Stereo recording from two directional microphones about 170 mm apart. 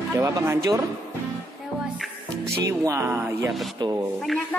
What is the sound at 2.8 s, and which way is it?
Speech, 15° right (ahead or behind).